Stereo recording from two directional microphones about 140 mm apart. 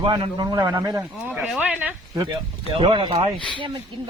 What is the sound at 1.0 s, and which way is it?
Speech, 10° right (ahead or behind).